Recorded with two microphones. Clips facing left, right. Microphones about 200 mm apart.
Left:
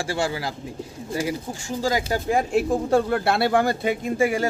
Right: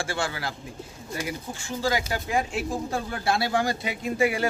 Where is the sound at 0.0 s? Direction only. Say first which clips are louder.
Left 4 dB; 35° left (ahead or behind).